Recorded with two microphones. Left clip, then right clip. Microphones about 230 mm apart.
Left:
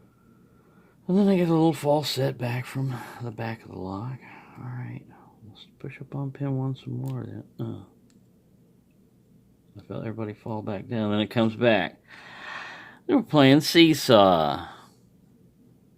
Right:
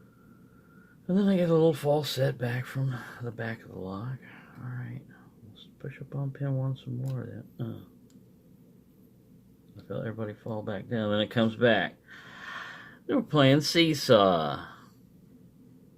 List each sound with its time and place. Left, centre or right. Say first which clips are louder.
1.0 s speech: left 4 dB; left
9.9 s speech: left 1 dB; left